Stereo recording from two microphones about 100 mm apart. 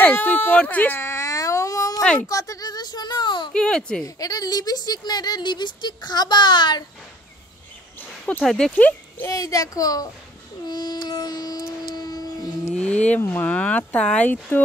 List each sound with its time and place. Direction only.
0.0 s whimper: 15° left (ahead or behind); by 2.0 s 35° left (ahead or behind)
2.0 s speech: 5° left (ahead or behind)
2.2 s a sound: 35° left (ahead or behind); by 3.5 s 50° left (ahead or behind)
3.5 s speech: 10° left (ahead or behind)
4.0 s speech: 40° left (ahead or behind)
8.3 s speech: 5° left (ahead or behind)
8.7 s a child's voice: 15° left (ahead or behind)
9.3 s a child's voice: 35° left (ahead or behind)
10.7 s a sound: 45° left (ahead or behind)
12.7 s speech: 10° left (ahead or behind)